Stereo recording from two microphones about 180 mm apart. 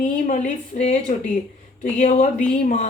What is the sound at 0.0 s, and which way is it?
A woman's voice, 45° left (ahead or behind).